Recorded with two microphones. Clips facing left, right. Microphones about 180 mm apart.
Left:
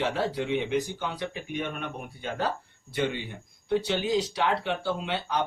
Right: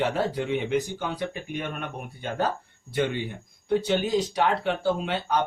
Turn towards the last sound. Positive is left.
turn(degrees=-50)  # may be behind; listen again after turning